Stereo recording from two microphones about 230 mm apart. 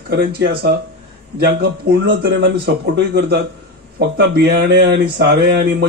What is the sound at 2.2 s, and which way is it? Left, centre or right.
Speech, right.